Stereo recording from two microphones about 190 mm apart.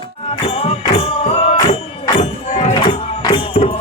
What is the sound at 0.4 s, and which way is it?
Music, 30° left (ahead or behind).